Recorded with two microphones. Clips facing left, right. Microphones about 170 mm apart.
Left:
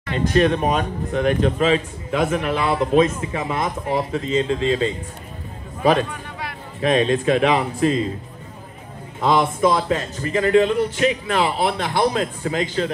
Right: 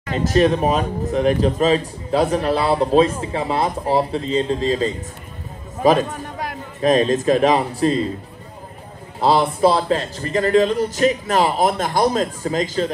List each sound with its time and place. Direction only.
0.3 s a man's voice: 35° right (ahead or behind)
9.2 s a man's voice: 35° right (ahead or behind)